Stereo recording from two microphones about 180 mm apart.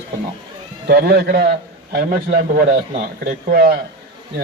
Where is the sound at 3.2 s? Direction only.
55° right (ahead or behind).